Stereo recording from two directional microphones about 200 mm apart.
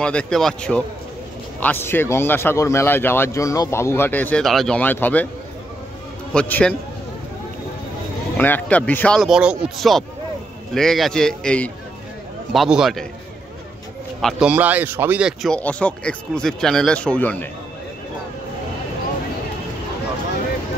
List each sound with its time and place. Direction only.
0.0 s speech: 5° left (ahead or behind)
6.3 s speech: 5° left (ahead or behind)
8.4 s speech: 10° left (ahead or behind)
14.2 s speech: 5° right (ahead or behind)